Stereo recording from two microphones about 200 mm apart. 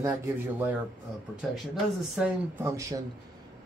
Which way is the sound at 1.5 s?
5° right (ahead or behind).